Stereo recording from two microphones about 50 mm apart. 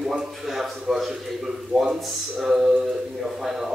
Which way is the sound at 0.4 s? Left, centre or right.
Centre.